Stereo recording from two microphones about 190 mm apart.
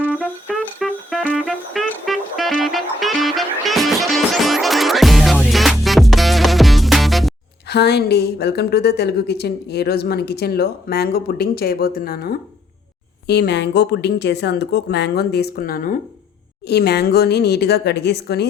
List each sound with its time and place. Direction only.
0.6 s music: centre (ahead or behind)
7.7 s a woman's voice: 60° left (ahead or behind)
13.2 s a woman's voice: 60° left (ahead or behind)
16.6 s a woman's voice: 60° left (ahead or behind)